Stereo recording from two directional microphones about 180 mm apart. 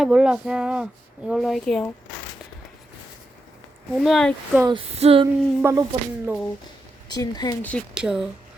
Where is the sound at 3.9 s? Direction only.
Centre (ahead or behind).